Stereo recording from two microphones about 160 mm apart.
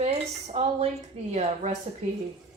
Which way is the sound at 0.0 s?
40° right (ahead or behind).